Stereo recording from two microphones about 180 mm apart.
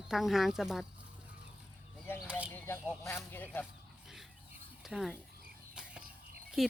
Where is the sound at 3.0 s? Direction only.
10° left (ahead or behind).